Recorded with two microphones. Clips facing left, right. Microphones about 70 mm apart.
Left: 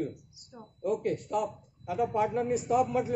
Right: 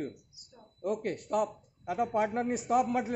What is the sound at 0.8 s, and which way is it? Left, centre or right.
A man's voice, right.